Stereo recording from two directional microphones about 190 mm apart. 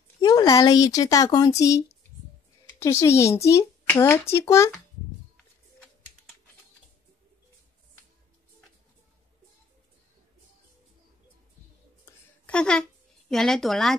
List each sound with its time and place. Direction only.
0.2 s speech: 20° left (ahead or behind)
12.4 s a woman's voice: 5° left (ahead or behind)